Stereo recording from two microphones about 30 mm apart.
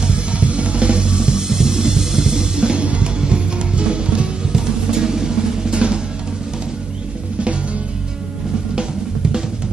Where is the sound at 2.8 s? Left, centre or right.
Right.